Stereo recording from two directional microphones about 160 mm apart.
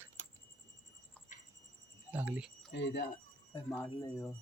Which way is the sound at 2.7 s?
90° left.